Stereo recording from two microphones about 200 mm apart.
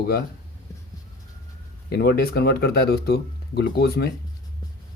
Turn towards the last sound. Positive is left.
turn(degrees=50)  # may be behind; listen again after turning